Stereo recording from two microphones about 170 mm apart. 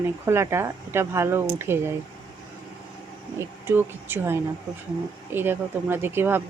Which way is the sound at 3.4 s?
10° right (ahead or behind).